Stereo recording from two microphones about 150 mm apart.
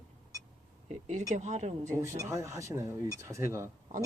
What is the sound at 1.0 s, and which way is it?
Speech, 55° right (ahead or behind).